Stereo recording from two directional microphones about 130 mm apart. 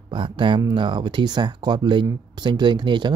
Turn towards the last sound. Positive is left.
turn(degrees=-35)  # may be behind; listen again after turning